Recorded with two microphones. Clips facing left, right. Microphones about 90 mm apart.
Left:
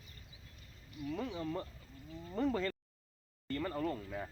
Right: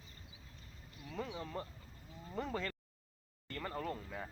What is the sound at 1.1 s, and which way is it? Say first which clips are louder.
Speech: left 3 dB; 5° right (ahead or behind).